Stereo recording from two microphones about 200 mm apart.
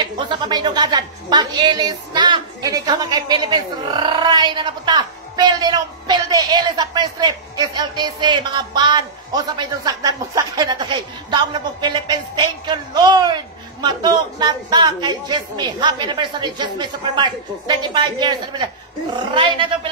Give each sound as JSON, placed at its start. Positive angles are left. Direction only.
{"t": 0.0, "sound": "a woman's voice", "side_deg": -25}